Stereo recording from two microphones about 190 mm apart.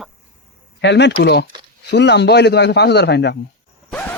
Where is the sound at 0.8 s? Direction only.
65° left (ahead or behind).